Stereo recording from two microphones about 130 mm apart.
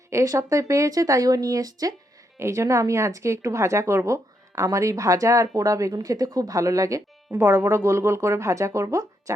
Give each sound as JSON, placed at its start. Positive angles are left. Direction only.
{"t": 0.1, "sound": "speech", "side_deg": -20}